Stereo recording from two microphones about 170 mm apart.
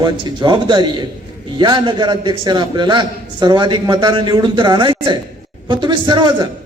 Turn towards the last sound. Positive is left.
turn(degrees=-25)  # may be behind; listen again after turning